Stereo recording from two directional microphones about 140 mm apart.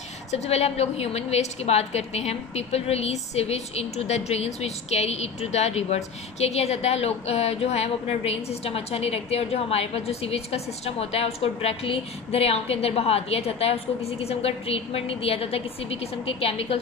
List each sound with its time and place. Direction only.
0.3 s a woman's voice: 50° left (ahead or behind)